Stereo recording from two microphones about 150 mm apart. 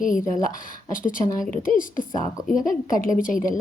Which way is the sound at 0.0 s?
65° left (ahead or behind).